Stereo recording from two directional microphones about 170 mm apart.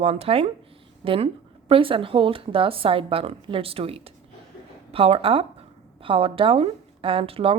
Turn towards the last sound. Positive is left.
turn(degrees=-35)  # may be behind; listen again after turning